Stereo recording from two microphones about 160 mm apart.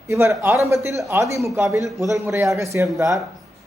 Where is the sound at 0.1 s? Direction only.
15° right (ahead or behind).